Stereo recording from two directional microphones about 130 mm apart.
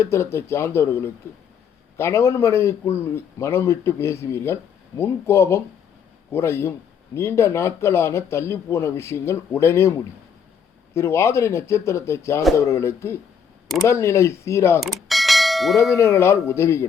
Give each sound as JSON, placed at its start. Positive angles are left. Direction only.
{"t": 0.0, "sound": "speech", "side_deg": 20}
{"t": 14.8, "sound": "bell", "side_deg": 0}
{"t": 16.0, "sound": "speech", "side_deg": 20}